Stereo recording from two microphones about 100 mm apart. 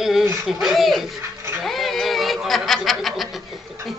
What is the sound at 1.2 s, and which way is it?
Speech, 25° right (ahead or behind).